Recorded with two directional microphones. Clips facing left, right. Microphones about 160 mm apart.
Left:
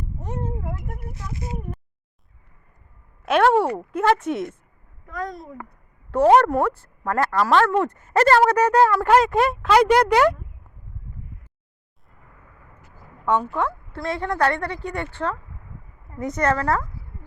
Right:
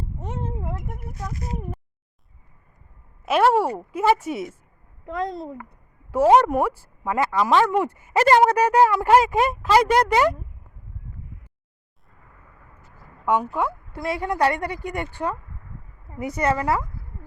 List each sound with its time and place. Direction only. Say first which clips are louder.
0.2 s a sound: left 2 dB; 25° right (ahead or behind)
0.9 s speech: right 2 dB; 25° left (ahead or behind)
3.2 s speech: left 1 dB; 5° right (ahead or behind)
5.0 s a child's voice: right 4 dB; 25° right (ahead or behind)
6.1 s speech: left 1 dB; 10° right (ahead or behind)
13.2 s speech: even; 10° right (ahead or behind)